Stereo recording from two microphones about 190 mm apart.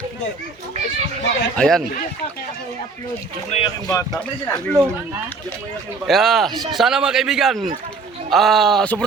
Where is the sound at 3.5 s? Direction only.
30° left (ahead or behind).